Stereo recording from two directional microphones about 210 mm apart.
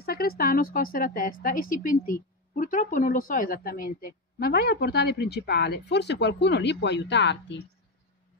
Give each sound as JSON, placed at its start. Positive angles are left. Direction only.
{"t": 0.0, "sound": "a woman's voice", "side_deg": 45}